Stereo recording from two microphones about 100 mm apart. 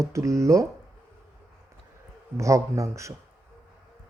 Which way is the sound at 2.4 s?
30° right (ahead or behind).